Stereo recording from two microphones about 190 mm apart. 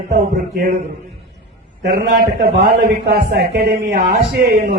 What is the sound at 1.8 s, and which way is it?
A man's voice, 50° right (ahead or behind).